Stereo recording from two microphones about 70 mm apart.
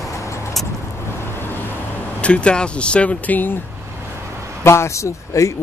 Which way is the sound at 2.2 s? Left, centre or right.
Centre.